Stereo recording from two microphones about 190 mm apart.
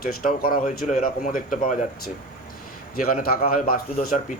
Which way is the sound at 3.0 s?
50° left (ahead or behind).